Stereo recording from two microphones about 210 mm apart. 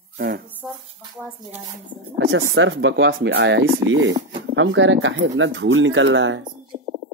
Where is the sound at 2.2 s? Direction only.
75° right (ahead or behind).